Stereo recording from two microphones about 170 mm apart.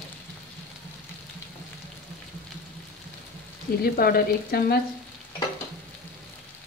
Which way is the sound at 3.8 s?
60° left (ahead or behind).